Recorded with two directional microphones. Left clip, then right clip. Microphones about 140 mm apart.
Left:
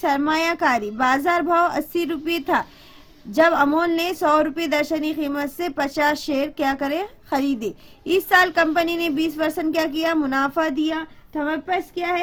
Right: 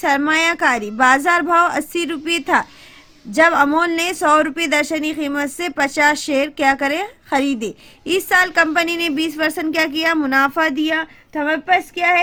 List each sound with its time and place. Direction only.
0.0 s speech: 20° right (ahead or behind)
10.8 s speech: 35° right (ahead or behind)